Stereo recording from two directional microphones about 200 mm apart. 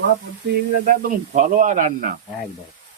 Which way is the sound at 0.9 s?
45° right (ahead or behind).